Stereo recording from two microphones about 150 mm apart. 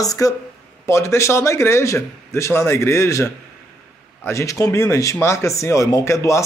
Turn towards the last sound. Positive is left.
turn(degrees=20)  # may be behind; listen again after turning